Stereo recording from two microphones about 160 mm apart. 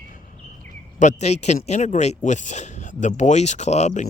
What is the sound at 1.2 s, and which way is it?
Speech, 45° left (ahead or behind).